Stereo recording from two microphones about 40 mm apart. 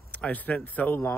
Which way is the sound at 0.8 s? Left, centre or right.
Left.